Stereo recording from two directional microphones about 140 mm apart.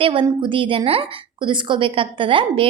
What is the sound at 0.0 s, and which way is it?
A woman's voice, 35° right (ahead or behind).